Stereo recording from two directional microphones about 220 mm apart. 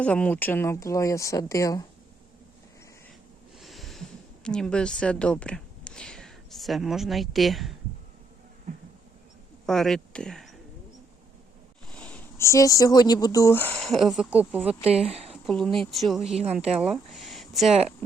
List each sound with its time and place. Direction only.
0.0 s speech: 5° left (ahead or behind)
3.6 s a sound: centre (ahead or behind)
4.4 s speech: 5° left (ahead or behind)
9.6 s speech: centre (ahead or behind)
11.9 s speech: 5° left (ahead or behind)
14.7 s speech: 25° right (ahead or behind)
15.3 s a woman's voice: 5° left (ahead or behind)
16.8 s a sound: centre (ahead or behind)